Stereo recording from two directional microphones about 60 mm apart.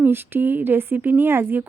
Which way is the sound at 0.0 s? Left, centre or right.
Right.